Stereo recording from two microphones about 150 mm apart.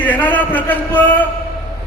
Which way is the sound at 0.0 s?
10° left (ahead or behind).